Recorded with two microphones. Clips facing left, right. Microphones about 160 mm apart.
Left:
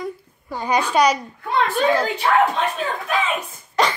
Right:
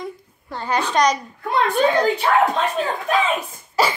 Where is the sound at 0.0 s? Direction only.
10° left (ahead or behind).